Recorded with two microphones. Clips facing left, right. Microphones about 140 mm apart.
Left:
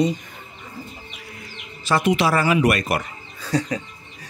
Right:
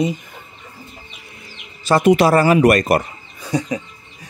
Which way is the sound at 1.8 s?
45° right (ahead or behind).